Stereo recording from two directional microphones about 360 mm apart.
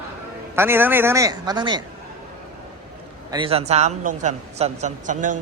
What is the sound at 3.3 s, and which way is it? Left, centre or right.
Speech, centre.